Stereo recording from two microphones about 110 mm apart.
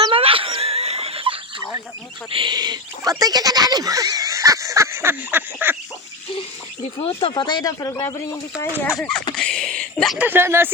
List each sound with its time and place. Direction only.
0.1 s a sound: 55° right (ahead or behind)
2.3 s speech: 45° right (ahead or behind); by 5.7 s 20° right (ahead or behind)
7.0 s speech: 55° left (ahead or behind); by 9.0 s 25° left (ahead or behind)
9.0 s speech: 5° left (ahead or behind)
9.3 s a sound: 10° left (ahead or behind)
10.2 s speech: 20° right (ahead or behind)